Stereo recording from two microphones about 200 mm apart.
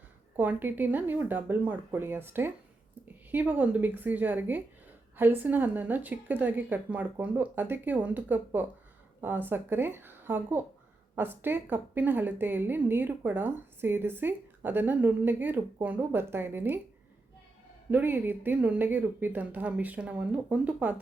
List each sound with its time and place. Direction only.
0.3 s a woman's voice: 10° right (ahead or behind)
17.9 s a woman's voice: 10° right (ahead or behind)